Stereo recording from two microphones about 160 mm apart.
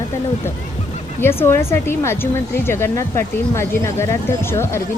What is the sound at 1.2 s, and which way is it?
Speech, 15° left (ahead or behind).